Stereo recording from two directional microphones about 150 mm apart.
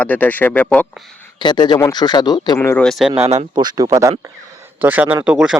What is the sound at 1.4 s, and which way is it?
Speech, 30° left (ahead or behind).